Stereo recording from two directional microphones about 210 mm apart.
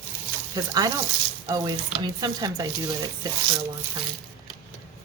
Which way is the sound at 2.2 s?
20° right (ahead or behind).